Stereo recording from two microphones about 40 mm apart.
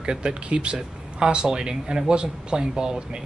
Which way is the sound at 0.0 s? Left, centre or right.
Right.